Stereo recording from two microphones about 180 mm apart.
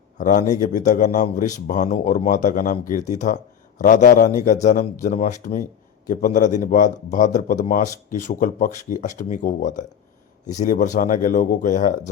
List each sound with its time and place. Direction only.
0.2 s a man's voice: 45° left (ahead or behind)